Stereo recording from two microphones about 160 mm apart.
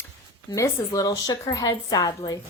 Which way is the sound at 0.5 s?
20° left (ahead or behind).